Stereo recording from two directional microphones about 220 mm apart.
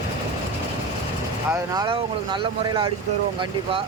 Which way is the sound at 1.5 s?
20° right (ahead or behind).